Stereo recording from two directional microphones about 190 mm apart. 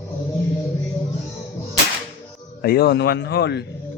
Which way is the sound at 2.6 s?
55° left (ahead or behind).